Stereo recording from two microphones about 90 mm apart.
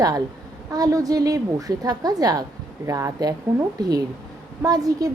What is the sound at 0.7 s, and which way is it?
A woman's voice, 45° right (ahead or behind).